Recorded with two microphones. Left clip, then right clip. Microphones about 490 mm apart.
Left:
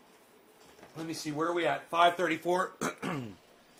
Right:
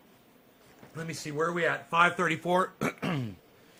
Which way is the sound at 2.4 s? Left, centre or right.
Right.